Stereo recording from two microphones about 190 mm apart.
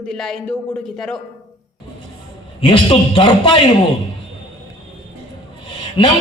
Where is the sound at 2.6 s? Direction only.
25° left (ahead or behind).